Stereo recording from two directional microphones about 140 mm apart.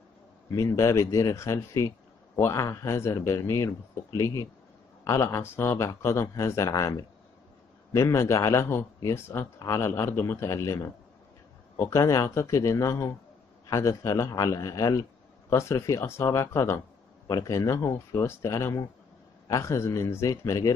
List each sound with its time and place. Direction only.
0.5 s speech: 25° left (ahead or behind)